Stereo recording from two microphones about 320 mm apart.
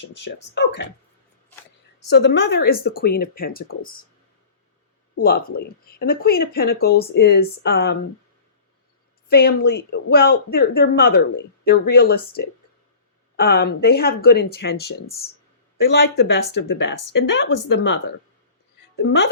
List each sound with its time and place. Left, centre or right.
0.2 s speech: left
2.0 s speech: left
5.2 s speech: left
9.3 s speech: left
19.0 s speech: left